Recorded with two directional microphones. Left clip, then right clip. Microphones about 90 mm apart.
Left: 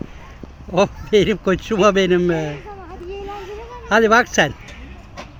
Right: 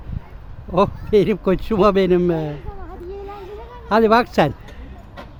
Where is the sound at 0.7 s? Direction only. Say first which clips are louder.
Even; 20° right (ahead or behind).